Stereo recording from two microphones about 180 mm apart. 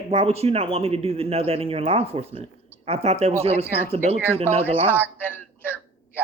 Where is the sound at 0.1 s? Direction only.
35° right (ahead or behind).